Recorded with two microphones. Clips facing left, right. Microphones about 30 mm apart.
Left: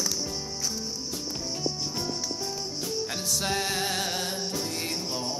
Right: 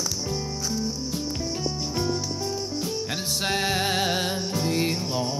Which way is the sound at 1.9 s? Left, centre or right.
Right.